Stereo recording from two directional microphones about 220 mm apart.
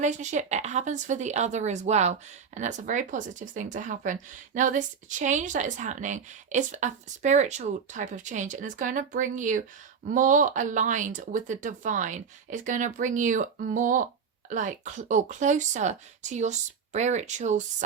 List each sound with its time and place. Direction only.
0.0 s speech: 35° right (ahead or behind)